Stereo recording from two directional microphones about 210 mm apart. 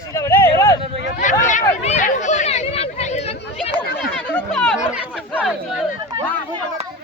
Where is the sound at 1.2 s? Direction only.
35° left (ahead or behind).